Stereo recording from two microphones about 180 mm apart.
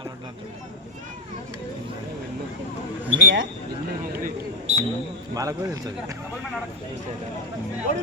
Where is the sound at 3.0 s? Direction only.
10° right (ahead or behind).